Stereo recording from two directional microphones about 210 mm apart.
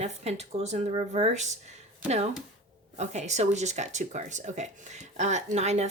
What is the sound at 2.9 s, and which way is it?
Speech, 35° right (ahead or behind).